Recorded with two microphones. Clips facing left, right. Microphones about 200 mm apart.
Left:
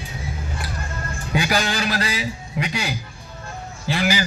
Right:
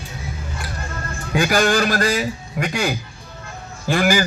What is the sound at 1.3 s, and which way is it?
A man's voice, 50° right (ahead or behind).